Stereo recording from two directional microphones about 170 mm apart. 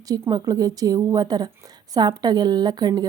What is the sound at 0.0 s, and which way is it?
A woman's voice, 20° right (ahead or behind).